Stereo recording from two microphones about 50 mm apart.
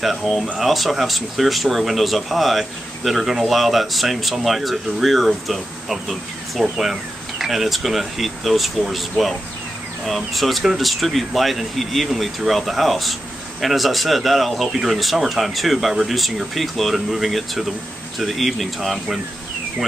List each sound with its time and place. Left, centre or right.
0.0 s speech: centre